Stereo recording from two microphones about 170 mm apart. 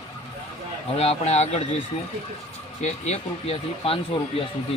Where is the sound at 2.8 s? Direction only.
40° left (ahead or behind).